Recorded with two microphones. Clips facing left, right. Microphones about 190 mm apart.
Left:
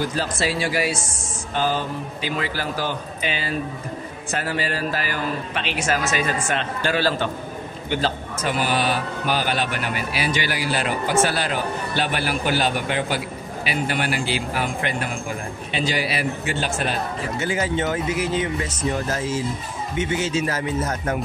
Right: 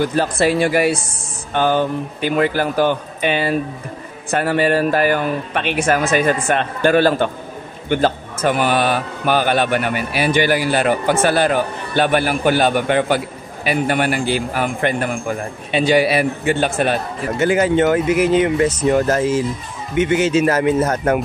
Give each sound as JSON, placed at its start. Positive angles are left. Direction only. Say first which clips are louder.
{"t": 0.1, "sound": "a man's voice", "louder": "right 8 dB", "side_deg": -60}